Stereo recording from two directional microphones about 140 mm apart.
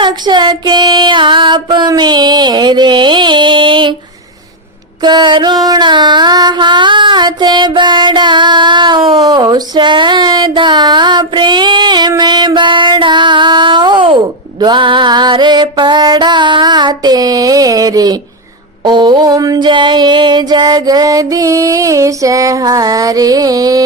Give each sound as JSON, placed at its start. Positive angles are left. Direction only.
{"t": 0.0, "sound": "music", "side_deg": -35}
{"t": 5.0, "sound": "music", "side_deg": -30}
{"t": 18.9, "sound": "a sound", "side_deg": -35}